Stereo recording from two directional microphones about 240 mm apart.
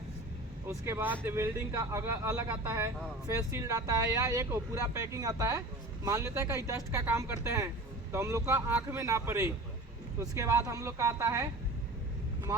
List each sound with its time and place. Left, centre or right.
0.7 s speech: centre
12.5 s speech: centre